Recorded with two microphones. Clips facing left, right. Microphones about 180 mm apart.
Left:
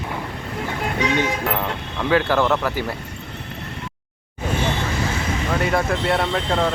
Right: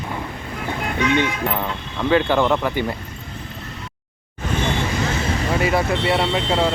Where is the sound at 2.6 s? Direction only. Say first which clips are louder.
Right 2 dB; centre (ahead or behind).